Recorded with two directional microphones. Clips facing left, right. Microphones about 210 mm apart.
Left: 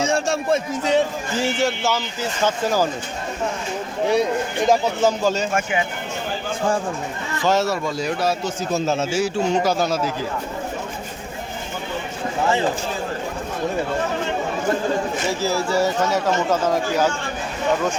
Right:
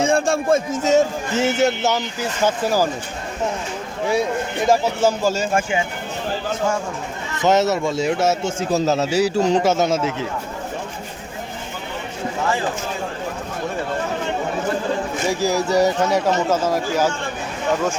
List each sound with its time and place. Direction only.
0.0 s a man's voice: 55° right (ahead or behind)
1.4 s speech: 20° right (ahead or behind)
4.6 s speech: 5° right (ahead or behind)
7.4 s speech: 20° right (ahead or behind)
8.7 s a man's voice: 40° right (ahead or behind)
9.6 s speech: 25° right (ahead or behind)
15.3 s speech: 15° right (ahead or behind)